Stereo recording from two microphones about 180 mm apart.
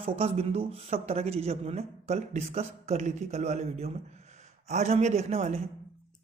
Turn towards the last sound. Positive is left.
turn(degrees=-35)  # may be behind; listen again after turning